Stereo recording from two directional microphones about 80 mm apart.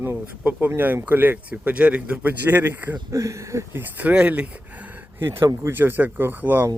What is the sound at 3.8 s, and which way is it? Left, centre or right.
A man's voice, right.